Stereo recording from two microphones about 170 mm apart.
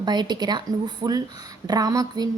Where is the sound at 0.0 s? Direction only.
25° right (ahead or behind).